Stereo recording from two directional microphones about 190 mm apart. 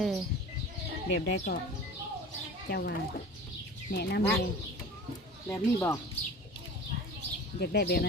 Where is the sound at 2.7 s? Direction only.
60° left (ahead or behind).